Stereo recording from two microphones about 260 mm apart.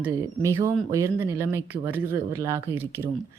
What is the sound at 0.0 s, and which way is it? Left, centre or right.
Speech, centre.